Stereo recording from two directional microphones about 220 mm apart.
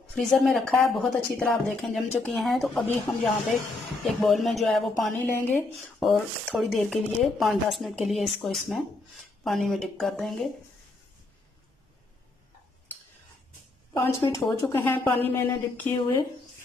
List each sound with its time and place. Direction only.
0.1 s a woman's voice: 5° left (ahead or behind)
14.0 s a woman's voice: 10° left (ahead or behind)